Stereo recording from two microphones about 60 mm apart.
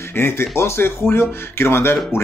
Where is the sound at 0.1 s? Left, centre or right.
Left.